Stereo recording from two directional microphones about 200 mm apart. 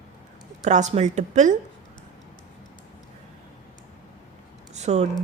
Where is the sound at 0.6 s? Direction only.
35° right (ahead or behind).